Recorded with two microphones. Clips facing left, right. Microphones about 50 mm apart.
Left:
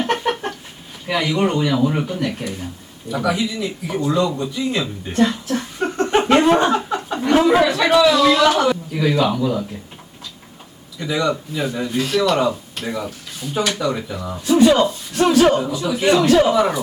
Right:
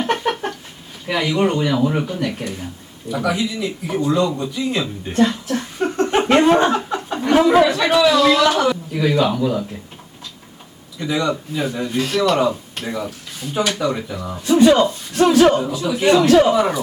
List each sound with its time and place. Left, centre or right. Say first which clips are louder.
0.0 s chicken: even; centre
1.0 s speech: right 1 dB; centre
4.5 s chuckle: even; centre
7.4 s speech: right 1 dB; centre
11.0 s speech: even; centre